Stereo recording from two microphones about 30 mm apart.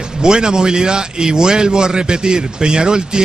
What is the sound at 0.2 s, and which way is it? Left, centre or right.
A man's voice, right.